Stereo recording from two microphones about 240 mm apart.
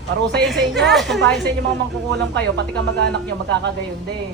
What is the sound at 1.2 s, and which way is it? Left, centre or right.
Speech, right.